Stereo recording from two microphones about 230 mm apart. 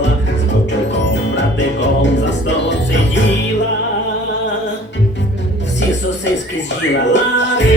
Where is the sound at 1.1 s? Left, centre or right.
Left.